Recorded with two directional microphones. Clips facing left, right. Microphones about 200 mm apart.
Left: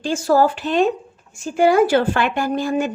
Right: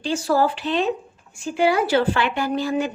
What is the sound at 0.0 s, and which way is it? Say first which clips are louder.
Speech: left 4 dB; 45° left (ahead or behind).